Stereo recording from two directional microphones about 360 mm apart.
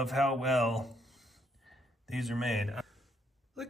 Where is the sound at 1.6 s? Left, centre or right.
Centre.